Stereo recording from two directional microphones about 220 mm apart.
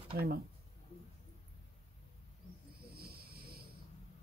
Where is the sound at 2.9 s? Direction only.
45° right (ahead or behind).